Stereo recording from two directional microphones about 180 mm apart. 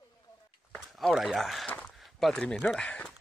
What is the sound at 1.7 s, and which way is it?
Walk, 5° left (ahead or behind).